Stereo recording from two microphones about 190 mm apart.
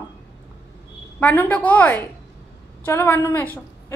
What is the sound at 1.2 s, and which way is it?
A woman's voice, 10° left (ahead or behind).